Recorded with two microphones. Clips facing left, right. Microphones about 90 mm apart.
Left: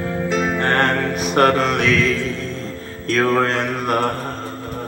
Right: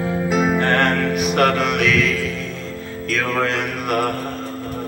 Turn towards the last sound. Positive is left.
turn(degrees=35)  # may be behind; listen again after turning